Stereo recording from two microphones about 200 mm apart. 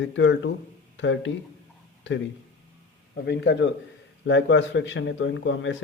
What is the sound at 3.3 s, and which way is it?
A man's voice, 60° left (ahead or behind).